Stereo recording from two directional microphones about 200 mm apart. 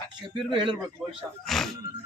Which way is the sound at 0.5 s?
25° right (ahead or behind).